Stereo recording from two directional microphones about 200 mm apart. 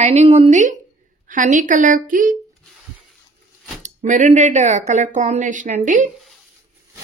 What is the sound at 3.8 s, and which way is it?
A woman's voice, 40° right (ahead or behind).